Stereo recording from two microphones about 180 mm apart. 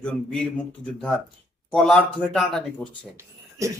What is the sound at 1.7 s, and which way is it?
A man's voice, 5° left (ahead or behind).